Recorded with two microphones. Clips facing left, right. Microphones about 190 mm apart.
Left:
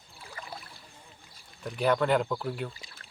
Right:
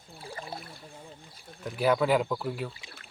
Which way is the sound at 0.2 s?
30° right (ahead or behind).